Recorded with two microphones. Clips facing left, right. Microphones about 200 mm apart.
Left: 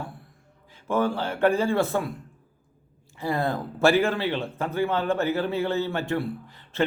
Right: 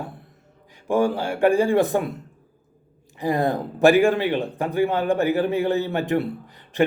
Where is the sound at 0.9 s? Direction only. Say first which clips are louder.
Right 4 dB; 15° right (ahead or behind).